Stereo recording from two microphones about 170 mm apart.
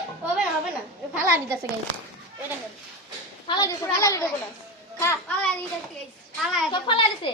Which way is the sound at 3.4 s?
25° left (ahead or behind).